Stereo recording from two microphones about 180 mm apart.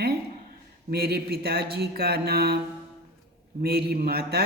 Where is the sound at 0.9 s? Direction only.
60° right (ahead or behind).